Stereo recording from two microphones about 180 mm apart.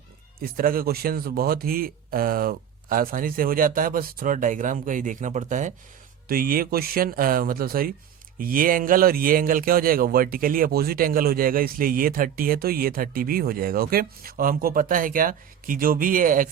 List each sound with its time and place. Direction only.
0.4 s speech: 55° right (ahead or behind)